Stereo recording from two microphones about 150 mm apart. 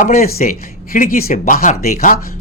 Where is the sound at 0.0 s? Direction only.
70° left (ahead or behind).